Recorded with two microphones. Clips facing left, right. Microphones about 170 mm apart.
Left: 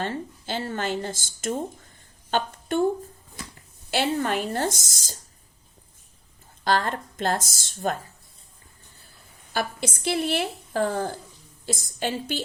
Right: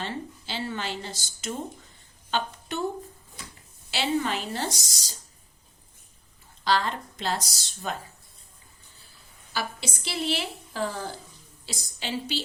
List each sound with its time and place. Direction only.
0.0 s a woman's voice: 50° left (ahead or behind)
3.9 s a woman's voice: 50° left (ahead or behind)
6.7 s a woman's voice: 50° left (ahead or behind)
9.5 s a woman's voice: 50° left (ahead or behind)